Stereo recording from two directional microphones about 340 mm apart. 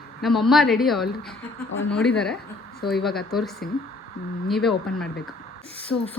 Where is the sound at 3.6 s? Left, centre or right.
Left.